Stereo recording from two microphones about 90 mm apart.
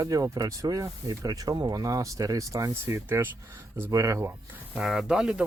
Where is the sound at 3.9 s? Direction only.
35° right (ahead or behind).